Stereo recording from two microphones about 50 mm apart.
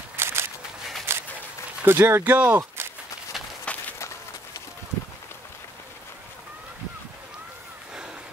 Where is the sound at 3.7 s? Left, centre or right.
Left.